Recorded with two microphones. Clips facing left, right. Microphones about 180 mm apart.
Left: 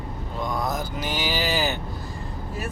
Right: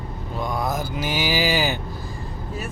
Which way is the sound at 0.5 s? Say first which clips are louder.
Right 2 dB; 5° right (ahead or behind).